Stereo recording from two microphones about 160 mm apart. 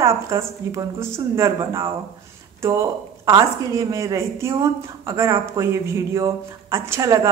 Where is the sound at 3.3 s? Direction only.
20° right (ahead or behind).